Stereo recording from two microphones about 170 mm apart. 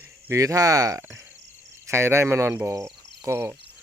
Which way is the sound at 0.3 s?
20° right (ahead or behind).